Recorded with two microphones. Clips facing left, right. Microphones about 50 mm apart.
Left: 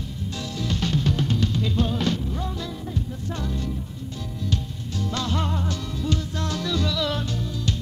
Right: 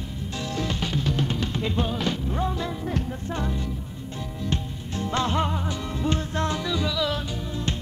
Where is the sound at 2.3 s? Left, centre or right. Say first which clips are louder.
Right 3 dB; right.